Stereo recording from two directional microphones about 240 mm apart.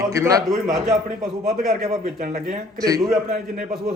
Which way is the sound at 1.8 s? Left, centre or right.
Right.